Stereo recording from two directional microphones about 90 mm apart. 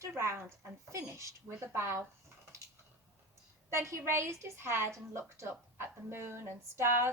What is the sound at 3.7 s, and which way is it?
A woman's voice, 30° right (ahead or behind).